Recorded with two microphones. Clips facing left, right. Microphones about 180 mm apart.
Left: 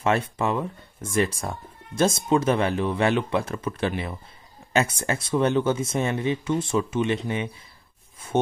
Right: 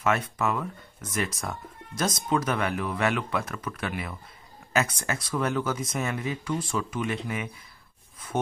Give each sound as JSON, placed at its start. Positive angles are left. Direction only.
{"t": 0.0, "sound": "speech", "side_deg": 30}